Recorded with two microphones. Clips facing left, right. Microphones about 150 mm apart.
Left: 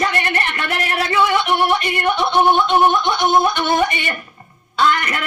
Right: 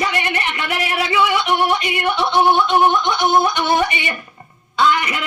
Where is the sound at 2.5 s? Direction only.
15° left (ahead or behind).